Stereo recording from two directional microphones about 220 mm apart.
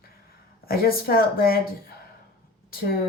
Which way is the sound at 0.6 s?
45° left (ahead or behind).